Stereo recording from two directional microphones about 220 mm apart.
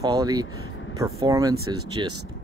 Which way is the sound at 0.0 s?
15° right (ahead or behind).